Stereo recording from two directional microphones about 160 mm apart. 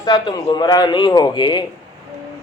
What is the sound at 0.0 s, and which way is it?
Speech, 25° left (ahead or behind).